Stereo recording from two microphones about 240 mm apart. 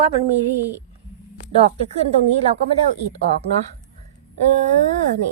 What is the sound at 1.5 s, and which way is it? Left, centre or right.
Speech, right.